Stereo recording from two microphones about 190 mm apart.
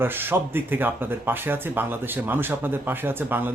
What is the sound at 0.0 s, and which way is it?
Speech, 10° right (ahead or behind).